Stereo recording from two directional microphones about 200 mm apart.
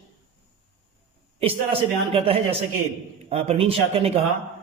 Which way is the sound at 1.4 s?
30° right (ahead or behind).